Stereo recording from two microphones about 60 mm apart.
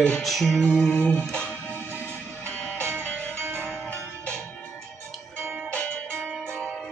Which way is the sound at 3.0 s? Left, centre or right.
Left.